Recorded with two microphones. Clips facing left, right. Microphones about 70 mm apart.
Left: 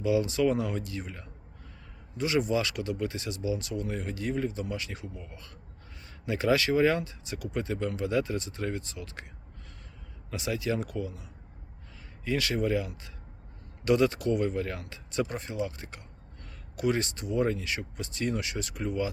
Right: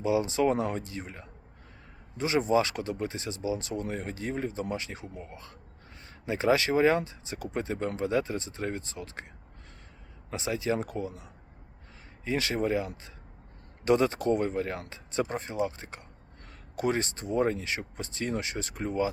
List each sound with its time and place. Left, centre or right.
0.0 s speech: right
10.2 s speech: right